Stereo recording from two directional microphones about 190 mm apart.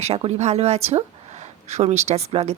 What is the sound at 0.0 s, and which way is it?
Speech, 35° right (ahead or behind).